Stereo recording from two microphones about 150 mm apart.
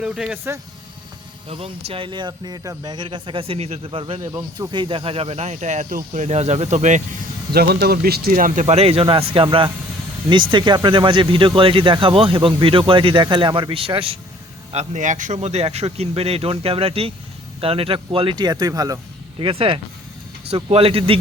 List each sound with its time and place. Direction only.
0.0 s speech: 5° right (ahead or behind)
1.5 s speech: 40° right (ahead or behind); by 6.2 s 60° right (ahead or behind)
6.2 s speech: 45° right (ahead or behind)
7.5 s speech: 90° right; by 8.6 s 65° right (ahead or behind)
8.6 s speech: 45° right (ahead or behind)
14.7 s speech: 50° right (ahead or behind); by 18.9 s 25° right (ahead or behind)
19.4 s speech: 35° right (ahead or behind)